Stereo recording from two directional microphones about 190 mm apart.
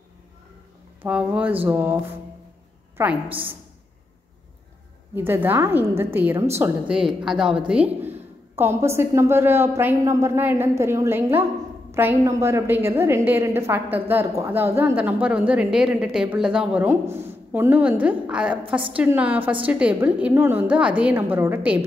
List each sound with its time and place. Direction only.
1.0 s a woman's voice: 5° right (ahead or behind)
3.0 s a woman's voice: 10° right (ahead or behind)
5.1 s a woman's voice: 10° right (ahead or behind)